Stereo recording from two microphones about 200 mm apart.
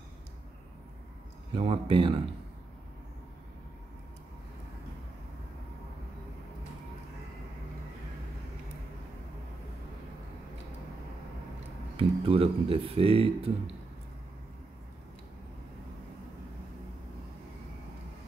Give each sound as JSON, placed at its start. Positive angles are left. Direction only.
{"t": 1.5, "sound": "speech", "side_deg": -25}
{"t": 12.0, "sound": "speech", "side_deg": -30}